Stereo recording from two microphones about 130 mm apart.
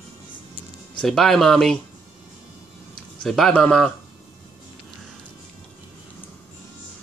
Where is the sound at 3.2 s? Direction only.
Centre (ahead or behind).